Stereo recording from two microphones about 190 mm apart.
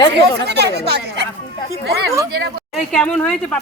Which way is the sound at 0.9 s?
60° right (ahead or behind).